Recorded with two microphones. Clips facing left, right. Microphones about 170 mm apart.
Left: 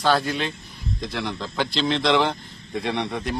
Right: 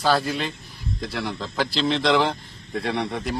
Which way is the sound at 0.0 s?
5° right (ahead or behind).